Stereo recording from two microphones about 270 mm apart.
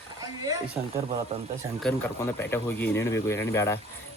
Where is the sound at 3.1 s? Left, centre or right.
Centre.